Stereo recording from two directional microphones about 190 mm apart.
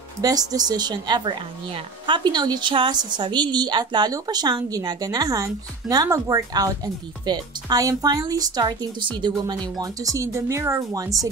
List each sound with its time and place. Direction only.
0.2 s a woman's voice: 20° right (ahead or behind)